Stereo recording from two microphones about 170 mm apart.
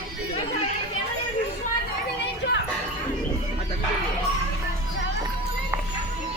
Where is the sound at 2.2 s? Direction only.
90° left.